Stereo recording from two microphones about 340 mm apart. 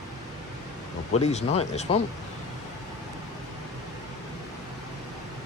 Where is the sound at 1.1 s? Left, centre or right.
Centre.